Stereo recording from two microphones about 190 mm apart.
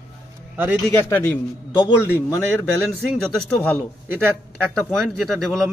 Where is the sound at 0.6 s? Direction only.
5° right (ahead or behind).